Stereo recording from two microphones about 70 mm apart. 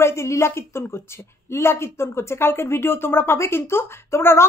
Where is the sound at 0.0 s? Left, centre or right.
Left.